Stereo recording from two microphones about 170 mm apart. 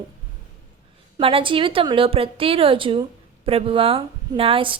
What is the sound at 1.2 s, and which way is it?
A woman's voice, 30° right (ahead or behind).